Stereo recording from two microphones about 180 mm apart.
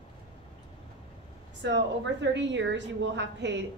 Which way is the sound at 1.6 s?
80° right.